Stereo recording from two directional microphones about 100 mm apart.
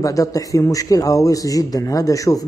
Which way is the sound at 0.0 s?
35° left (ahead or behind).